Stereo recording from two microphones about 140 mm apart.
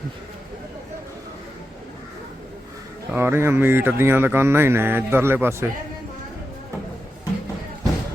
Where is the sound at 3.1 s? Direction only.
15° right (ahead or behind).